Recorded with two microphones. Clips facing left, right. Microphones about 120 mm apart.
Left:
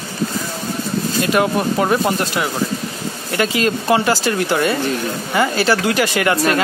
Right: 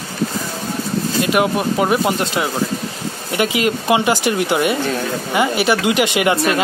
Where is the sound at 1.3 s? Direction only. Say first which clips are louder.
Left 1 dB; 15° right (ahead or behind).